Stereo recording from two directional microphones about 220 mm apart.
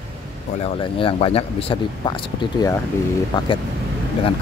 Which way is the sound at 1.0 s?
25° left (ahead or behind).